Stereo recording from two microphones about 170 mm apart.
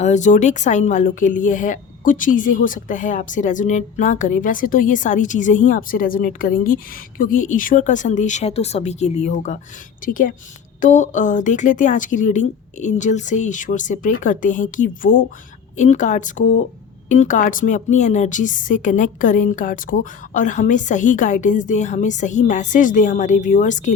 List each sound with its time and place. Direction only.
0.0 s speech: 45° left (ahead or behind)